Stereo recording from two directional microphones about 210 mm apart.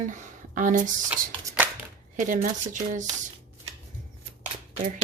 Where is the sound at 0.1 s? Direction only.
40° right (ahead or behind).